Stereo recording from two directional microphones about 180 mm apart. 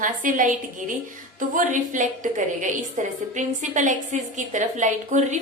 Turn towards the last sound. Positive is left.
turn(degrees=-40)  # may be behind; listen again after turning